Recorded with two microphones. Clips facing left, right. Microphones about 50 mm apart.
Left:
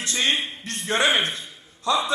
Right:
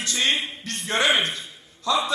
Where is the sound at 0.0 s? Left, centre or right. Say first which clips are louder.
Even; left.